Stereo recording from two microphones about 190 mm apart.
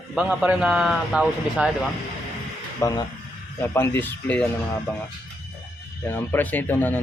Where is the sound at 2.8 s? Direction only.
15° left (ahead or behind).